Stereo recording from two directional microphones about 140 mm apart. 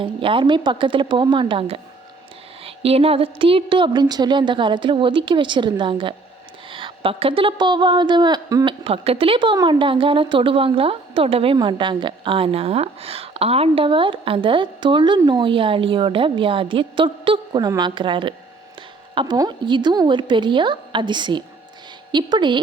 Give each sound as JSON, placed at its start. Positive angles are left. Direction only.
{"t": 0.0, "sound": "a woman's voice", "side_deg": -40}
{"t": 6.7, "sound": "a sound", "side_deg": -40}
{"t": 8.6, "sound": "a woman's voice", "side_deg": -45}